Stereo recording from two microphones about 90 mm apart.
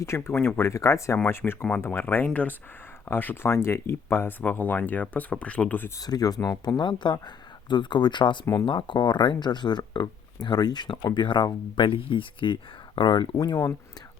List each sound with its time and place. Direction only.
0.0 s speech: 30° left (ahead or behind)
0.3 s speech: 20° left (ahead or behind)
0.7 s speech: 35° left (ahead or behind); by 5.9 s 20° left (ahead or behind)
6.0 s speech: 45° left (ahead or behind)
11.9 s speech: 75° left (ahead or behind)
13.0 s speech: 60° left (ahead or behind)
13.3 s speech: 40° left (ahead or behind)